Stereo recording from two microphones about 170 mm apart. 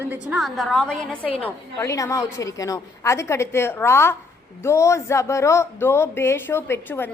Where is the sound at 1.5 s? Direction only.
20° left (ahead or behind).